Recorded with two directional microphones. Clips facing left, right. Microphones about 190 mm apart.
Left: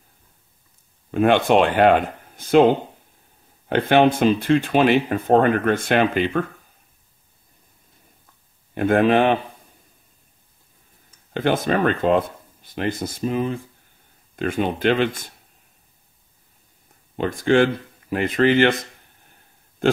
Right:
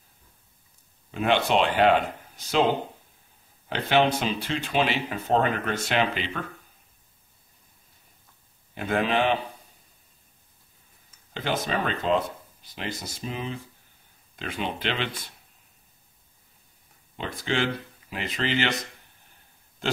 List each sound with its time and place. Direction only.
1.1 s speech: 50° left (ahead or behind)
3.6 s speech: 55° left (ahead or behind)
8.7 s speech: 55° left (ahead or behind)
11.3 s speech: 50° left (ahead or behind)
17.2 s speech: 50° left (ahead or behind)
19.8 s a sound: 50° left (ahead or behind)